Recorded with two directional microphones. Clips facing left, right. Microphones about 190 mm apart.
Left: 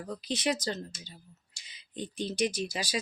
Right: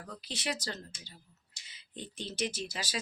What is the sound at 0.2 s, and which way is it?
Speech, 20° left (ahead or behind).